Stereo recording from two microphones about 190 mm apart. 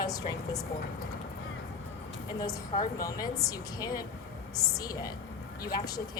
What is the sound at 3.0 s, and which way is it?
Speech, 20° left (ahead or behind).